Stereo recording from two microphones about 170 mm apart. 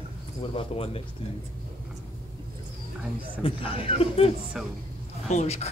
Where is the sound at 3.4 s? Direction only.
35° left (ahead or behind).